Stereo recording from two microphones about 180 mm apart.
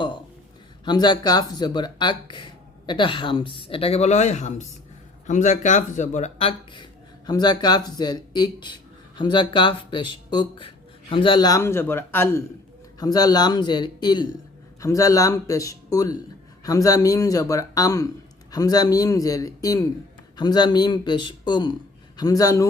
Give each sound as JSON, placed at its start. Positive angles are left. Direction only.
{"t": 0.9, "sound": "speech", "side_deg": 25}
{"t": 7.3, "sound": "speech", "side_deg": 25}